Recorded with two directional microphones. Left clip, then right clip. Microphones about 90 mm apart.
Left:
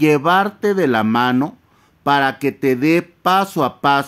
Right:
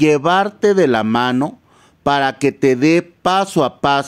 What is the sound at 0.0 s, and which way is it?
Speech, 25° right (ahead or behind).